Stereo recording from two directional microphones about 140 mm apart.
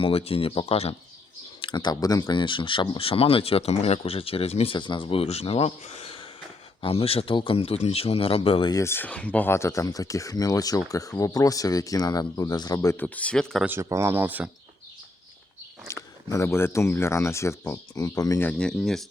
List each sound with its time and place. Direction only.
0.0 s speech: 45° left (ahead or behind)
1.6 s speech: 35° left (ahead or behind)
8.7 s speech: 20° left (ahead or behind)
13.0 s speech: 10° left (ahead or behind)
13.7 s speech: 20° right (ahead or behind)
15.9 s speech: 20° left (ahead or behind)
18.4 s speech: 5° left (ahead or behind)